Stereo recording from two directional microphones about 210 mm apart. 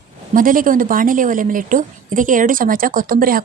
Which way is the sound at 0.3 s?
40° right (ahead or behind).